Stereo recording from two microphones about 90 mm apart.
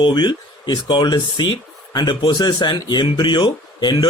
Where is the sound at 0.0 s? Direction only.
60° left (ahead or behind).